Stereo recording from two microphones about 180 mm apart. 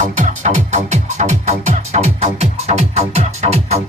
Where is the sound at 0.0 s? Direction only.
45° right (ahead or behind).